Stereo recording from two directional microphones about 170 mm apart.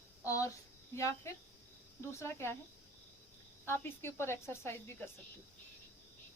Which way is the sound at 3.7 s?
15° left (ahead or behind).